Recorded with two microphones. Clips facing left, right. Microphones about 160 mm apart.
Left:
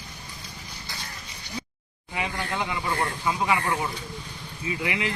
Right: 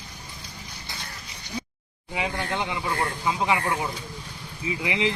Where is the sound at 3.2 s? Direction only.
15° right (ahead or behind).